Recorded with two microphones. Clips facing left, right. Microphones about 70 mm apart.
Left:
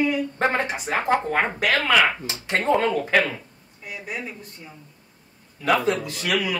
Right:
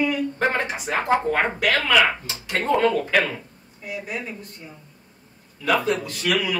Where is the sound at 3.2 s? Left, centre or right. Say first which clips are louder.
Even; centre.